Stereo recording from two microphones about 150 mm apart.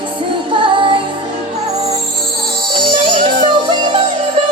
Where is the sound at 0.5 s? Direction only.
35° right (ahead or behind).